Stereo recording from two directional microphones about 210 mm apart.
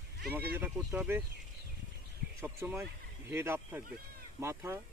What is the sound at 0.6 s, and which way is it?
Speech, 10° right (ahead or behind).